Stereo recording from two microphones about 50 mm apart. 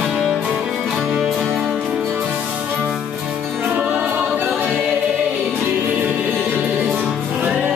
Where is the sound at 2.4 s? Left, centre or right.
Right.